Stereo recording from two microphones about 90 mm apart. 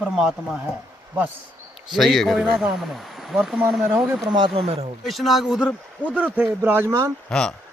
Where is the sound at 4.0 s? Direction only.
Centre (ahead or behind).